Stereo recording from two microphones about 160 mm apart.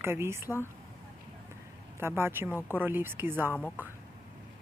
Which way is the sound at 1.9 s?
15° right (ahead or behind).